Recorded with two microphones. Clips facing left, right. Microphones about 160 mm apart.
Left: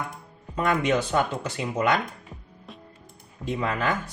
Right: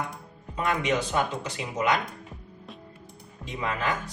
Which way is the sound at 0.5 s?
50° left (ahead or behind).